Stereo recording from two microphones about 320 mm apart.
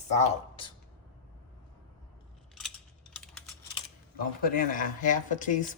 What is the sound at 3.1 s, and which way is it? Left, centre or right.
Typing, centre.